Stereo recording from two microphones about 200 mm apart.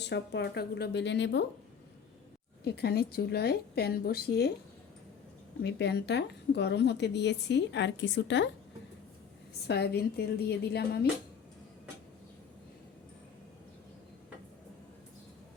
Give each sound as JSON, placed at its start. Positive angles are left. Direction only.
{"t": 0.0, "sound": "a woman's voice", "side_deg": 60}
{"t": 2.6, "sound": "a woman's voice", "side_deg": 55}
{"t": 5.6, "sound": "a woman's voice", "side_deg": 55}
{"t": 9.6, "sound": "a woman's voice", "side_deg": 55}